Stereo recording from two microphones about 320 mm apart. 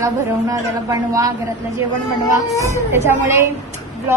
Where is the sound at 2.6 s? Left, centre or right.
Centre.